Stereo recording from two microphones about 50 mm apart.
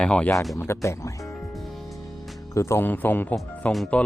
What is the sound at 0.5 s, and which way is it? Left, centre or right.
Speech, left.